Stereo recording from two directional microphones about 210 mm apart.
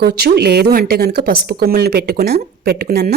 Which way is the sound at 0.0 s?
50° right (ahead or behind).